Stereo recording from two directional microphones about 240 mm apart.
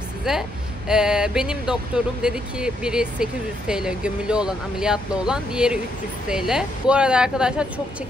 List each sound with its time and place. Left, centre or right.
0.2 s speech: centre